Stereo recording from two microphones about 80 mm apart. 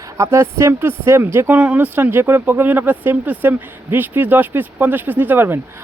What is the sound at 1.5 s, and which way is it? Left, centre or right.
Speech, centre.